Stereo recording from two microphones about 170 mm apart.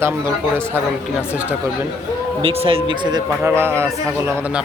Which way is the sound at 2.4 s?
35° right (ahead or behind).